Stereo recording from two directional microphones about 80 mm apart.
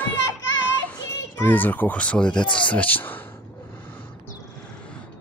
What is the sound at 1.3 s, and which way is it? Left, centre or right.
Speech, left.